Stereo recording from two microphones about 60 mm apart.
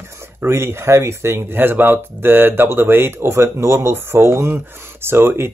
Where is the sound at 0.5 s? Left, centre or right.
Right.